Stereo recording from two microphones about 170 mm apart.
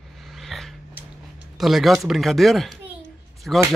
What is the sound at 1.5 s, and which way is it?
Speech, centre (ahead or behind).